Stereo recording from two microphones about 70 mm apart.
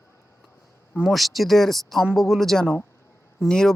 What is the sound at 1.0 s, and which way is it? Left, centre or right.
Speech, centre.